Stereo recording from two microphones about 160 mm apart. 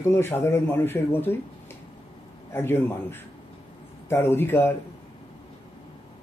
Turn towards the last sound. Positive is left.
turn(degrees=15)  # may be behind; listen again after turning